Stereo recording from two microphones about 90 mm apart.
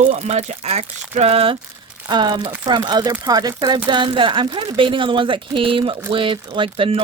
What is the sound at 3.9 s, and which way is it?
Speech, 65° right (ahead or behind).